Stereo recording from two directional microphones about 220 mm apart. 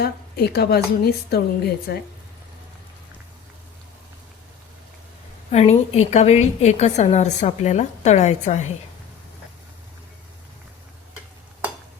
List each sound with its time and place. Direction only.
0.0 s a woman's voice: 45° left (ahead or behind)
5.5 s a woman's voice: 30° left (ahead or behind)